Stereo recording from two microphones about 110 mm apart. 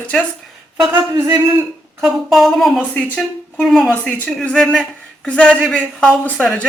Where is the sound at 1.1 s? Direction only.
40° right (ahead or behind).